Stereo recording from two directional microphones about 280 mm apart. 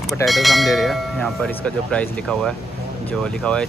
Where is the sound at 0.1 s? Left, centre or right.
Centre.